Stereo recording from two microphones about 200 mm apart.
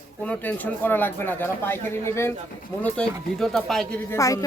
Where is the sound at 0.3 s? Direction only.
10° left (ahead or behind).